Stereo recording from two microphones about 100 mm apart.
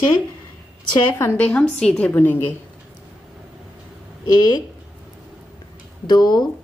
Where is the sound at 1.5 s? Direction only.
10° left (ahead or behind).